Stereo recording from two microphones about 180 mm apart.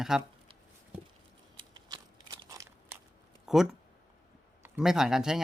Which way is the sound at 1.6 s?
25° right (ahead or behind).